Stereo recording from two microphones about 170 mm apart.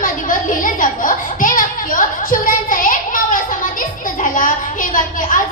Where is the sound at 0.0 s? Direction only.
50° left (ahead or behind).